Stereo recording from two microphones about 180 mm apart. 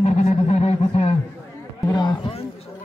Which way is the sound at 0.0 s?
40° left (ahead or behind).